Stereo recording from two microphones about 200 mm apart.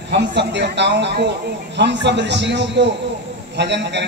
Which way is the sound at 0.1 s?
60° right (ahead or behind).